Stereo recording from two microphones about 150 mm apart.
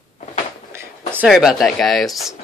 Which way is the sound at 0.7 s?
15° right (ahead or behind).